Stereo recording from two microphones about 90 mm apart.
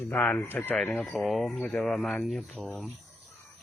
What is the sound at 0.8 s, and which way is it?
Speech, 10° left (ahead or behind).